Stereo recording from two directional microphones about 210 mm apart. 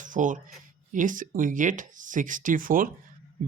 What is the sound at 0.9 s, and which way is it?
Speech, 40° right (ahead or behind).